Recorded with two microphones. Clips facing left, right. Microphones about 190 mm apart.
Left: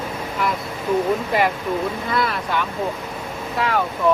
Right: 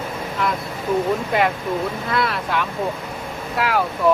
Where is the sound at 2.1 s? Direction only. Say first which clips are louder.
Right 1 dB; centre (ahead or behind).